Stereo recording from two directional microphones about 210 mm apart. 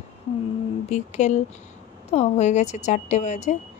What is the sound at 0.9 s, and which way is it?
A woman's voice, 35° left (ahead or behind).